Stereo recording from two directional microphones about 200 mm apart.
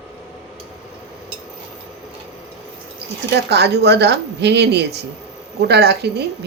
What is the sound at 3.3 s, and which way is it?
Speech, 55° right (ahead or behind).